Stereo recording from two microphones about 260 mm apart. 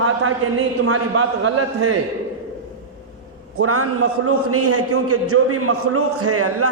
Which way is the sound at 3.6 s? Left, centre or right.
Right.